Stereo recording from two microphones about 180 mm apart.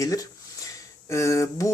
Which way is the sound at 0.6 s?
15° left (ahead or behind).